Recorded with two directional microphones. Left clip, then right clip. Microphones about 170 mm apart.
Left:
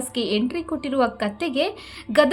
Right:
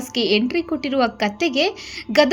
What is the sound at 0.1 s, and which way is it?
A woman's voice, 10° right (ahead or behind).